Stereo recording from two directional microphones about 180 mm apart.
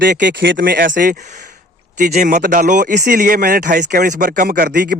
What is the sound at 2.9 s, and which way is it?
Speech, 65° right (ahead or behind).